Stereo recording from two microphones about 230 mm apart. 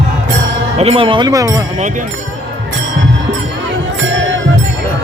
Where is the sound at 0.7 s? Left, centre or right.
Right.